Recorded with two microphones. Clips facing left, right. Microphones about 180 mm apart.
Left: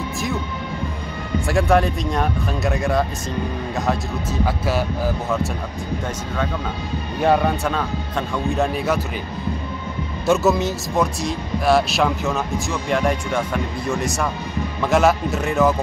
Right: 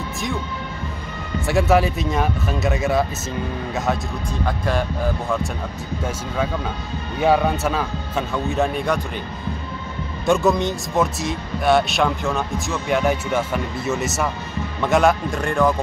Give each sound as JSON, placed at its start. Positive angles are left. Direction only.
{"t": 1.5, "sound": "speech", "side_deg": -5}
{"t": 7.2, "sound": "speech", "side_deg": 0}
{"t": 10.2, "sound": "speech", "side_deg": 0}